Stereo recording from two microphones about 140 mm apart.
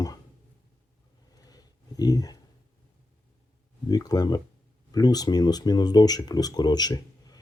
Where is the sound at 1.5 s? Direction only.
25° left (ahead or behind).